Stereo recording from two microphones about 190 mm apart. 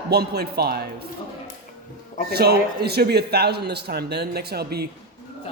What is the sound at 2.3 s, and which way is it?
A man's voice, 55° right (ahead or behind).